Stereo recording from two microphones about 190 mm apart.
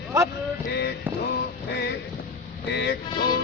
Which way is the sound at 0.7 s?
60° left (ahead or behind).